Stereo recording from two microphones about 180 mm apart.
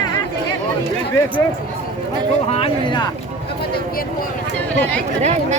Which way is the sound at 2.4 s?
35° left (ahead or behind).